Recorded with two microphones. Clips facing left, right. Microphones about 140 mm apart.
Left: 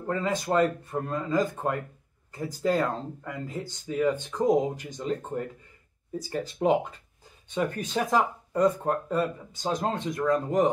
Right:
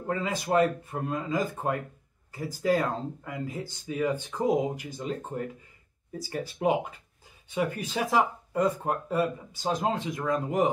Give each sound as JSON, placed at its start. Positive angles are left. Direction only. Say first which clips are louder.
{"t": 0.0, "sound": "speech", "louder": "left 2 dB", "side_deg": -10}
{"t": 6.1, "sound": "speech", "louder": "left 2 dB", "side_deg": -10}